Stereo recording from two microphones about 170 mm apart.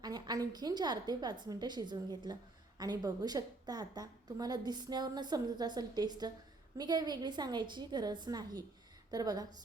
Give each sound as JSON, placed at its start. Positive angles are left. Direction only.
{"t": 0.0, "sound": "a woman's voice", "side_deg": -25}